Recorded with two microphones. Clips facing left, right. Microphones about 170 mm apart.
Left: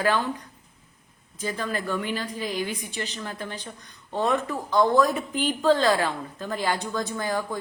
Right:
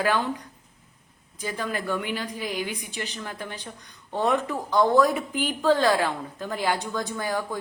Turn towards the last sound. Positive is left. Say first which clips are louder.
# left 1 dB
turn(degrees=-10)  # may be behind; listen again after turning